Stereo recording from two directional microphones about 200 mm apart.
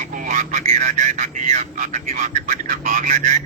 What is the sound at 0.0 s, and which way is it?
Speech, 40° right (ahead or behind).